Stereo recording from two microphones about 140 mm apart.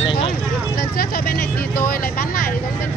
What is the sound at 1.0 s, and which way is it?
Vehicle, 90° left.